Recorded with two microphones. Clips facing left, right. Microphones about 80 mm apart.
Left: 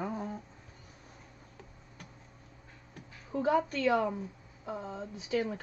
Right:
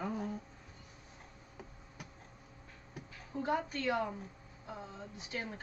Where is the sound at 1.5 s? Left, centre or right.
Centre.